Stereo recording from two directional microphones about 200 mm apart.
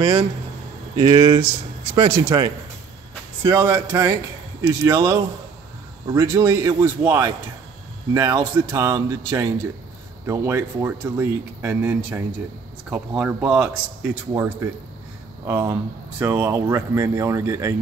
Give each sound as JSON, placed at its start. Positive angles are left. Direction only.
{"t": 0.0, "sound": "speech", "side_deg": -30}